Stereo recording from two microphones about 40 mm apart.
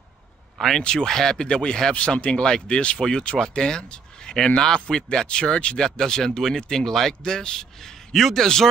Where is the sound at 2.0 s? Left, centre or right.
Left.